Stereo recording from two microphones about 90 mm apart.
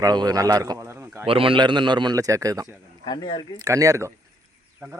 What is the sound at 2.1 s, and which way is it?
Speech, 40° right (ahead or behind).